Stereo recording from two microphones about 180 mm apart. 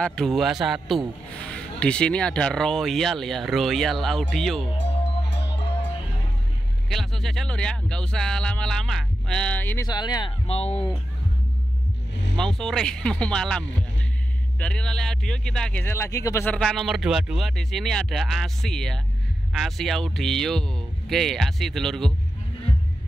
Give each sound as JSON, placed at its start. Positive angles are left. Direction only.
{"t": 0.0, "sound": "a man's voice", "side_deg": 5}
{"t": 5.3, "sound": "music", "side_deg": 70}
{"t": 6.9, "sound": "a man's voice", "side_deg": 0}
{"t": 9.8, "sound": "speech", "side_deg": 25}
{"t": 10.4, "sound": "speech", "side_deg": 35}
{"t": 12.4, "sound": "a man's voice", "side_deg": 5}